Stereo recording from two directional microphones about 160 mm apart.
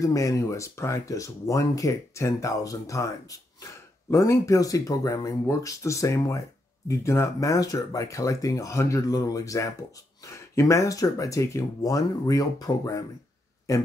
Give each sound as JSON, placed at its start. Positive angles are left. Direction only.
{"t": 0.0, "sound": "speech", "side_deg": 20}